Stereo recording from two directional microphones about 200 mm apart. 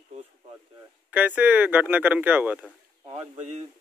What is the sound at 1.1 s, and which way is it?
Speech, 10° right (ahead or behind).